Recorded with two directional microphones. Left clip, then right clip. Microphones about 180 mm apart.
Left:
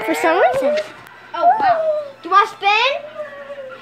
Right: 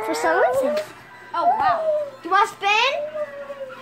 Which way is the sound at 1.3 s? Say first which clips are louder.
Left 5 dB; 40° right (ahead or behind).